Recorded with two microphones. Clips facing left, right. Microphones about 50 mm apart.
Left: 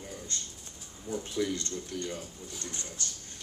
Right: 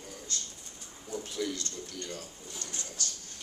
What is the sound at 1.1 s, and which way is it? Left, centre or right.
Speech, centre.